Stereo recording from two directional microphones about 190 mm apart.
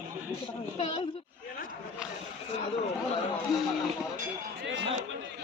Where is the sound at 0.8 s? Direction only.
25° left (ahead or behind).